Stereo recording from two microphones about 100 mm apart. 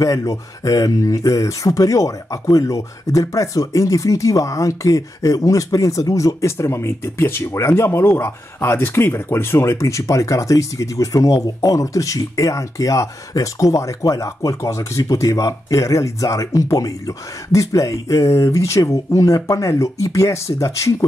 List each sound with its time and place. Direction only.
0.0 s speech: 35° left (ahead or behind)